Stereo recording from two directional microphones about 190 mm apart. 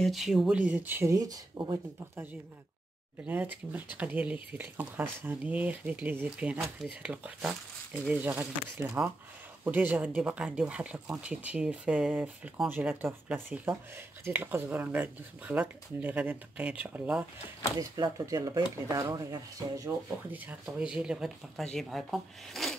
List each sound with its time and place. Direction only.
0.0 s speech: centre (ahead or behind); by 2.2 s 20° right (ahead or behind)
3.3 s speech: 10° right (ahead or behind)
17.7 s speech: 20° right (ahead or behind); by 22.8 s centre (ahead or behind)